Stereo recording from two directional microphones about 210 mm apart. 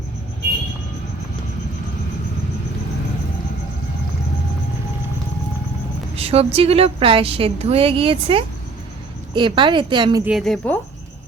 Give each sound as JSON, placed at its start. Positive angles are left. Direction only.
{"t": 6.1, "sound": "a woman's voice", "side_deg": -30}
{"t": 10.2, "sound": "a woman's voice", "side_deg": 0}